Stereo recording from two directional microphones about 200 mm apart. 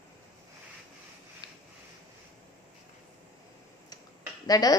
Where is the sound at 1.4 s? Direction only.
20° left (ahead or behind).